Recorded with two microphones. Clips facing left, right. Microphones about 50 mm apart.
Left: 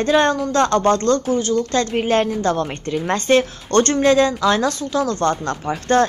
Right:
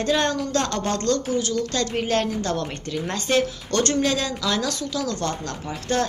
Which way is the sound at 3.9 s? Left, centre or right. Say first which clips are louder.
Left 8 dB; left.